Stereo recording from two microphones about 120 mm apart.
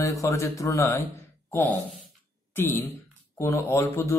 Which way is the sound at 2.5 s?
20° left (ahead or behind).